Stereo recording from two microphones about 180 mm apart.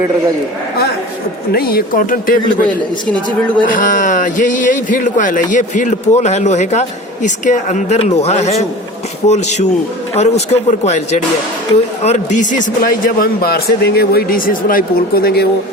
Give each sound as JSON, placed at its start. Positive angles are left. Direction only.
{"t": 1.5, "sound": "a man's voice", "side_deg": 55}